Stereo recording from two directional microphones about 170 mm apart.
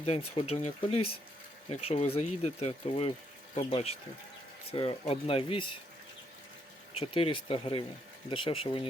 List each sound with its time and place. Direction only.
0.0 s speech: 35° left (ahead or behind)
6.9 s speech: 30° left (ahead or behind)